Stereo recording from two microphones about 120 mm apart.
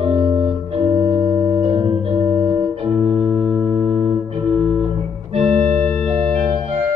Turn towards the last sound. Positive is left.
turn(degrees=10)  # may be behind; listen again after turning